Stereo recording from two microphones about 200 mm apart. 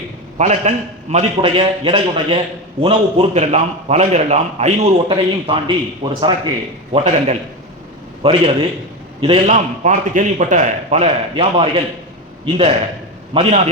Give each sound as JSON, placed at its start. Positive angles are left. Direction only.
{"t": 0.3, "sound": "a man's voice", "side_deg": -35}